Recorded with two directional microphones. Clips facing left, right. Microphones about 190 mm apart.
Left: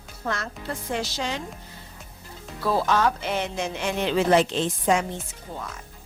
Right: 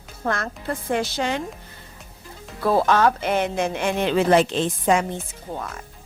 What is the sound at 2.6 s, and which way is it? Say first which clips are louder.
Speech: right 4 dB; 55° right (ahead or behind).